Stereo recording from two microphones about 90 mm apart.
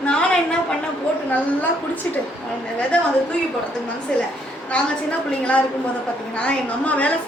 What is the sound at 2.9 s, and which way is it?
Speech, 10° left (ahead or behind).